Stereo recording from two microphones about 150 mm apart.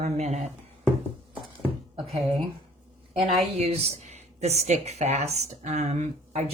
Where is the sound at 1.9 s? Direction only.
40° right (ahead or behind).